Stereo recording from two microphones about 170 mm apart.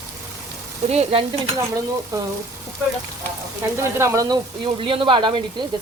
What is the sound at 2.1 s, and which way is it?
Speech, 20° right (ahead or behind).